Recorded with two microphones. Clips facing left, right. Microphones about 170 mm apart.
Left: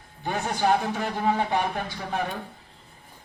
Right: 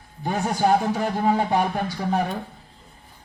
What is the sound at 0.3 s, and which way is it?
A man's voice, 40° right (ahead or behind).